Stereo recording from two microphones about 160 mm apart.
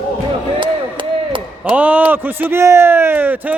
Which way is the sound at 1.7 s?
10° right (ahead or behind).